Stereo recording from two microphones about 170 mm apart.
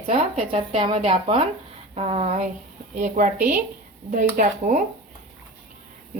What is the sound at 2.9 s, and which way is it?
Speech, 50° right (ahead or behind).